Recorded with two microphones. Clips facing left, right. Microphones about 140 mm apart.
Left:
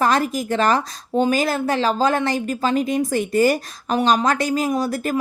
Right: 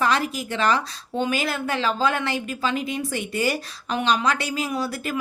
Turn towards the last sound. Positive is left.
turn(degrees=45)  # may be behind; listen again after turning